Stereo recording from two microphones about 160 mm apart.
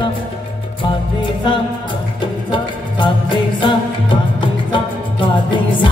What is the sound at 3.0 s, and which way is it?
Music, 30° left (ahead or behind).